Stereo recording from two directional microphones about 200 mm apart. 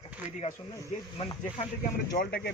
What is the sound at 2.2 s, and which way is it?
Speech, 55° left (ahead or behind).